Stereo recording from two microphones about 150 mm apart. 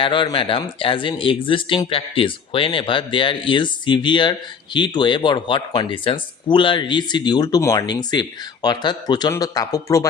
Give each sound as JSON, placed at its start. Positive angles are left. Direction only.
{"t": 0.0, "sound": "speech", "side_deg": 35}